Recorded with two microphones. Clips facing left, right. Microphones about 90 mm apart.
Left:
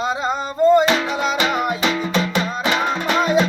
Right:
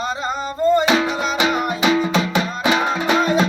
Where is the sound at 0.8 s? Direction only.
10° right (ahead or behind).